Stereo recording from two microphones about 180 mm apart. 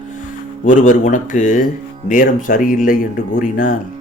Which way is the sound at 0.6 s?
45° left (ahead or behind).